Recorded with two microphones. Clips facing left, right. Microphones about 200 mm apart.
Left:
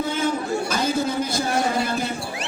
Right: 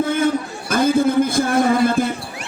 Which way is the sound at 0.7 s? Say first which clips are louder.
Right 11 dB; 55° right (ahead or behind).